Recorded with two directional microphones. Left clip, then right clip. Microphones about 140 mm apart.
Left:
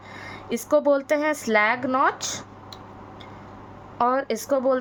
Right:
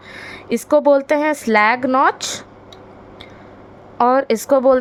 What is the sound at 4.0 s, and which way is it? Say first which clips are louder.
Speech: right 8 dB; 45° right (ahead or behind).